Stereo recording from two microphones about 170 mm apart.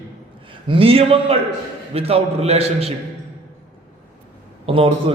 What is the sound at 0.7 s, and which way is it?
A man's voice, 35° right (ahead or behind).